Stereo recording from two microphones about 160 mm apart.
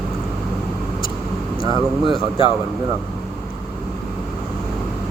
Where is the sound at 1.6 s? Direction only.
25° right (ahead or behind).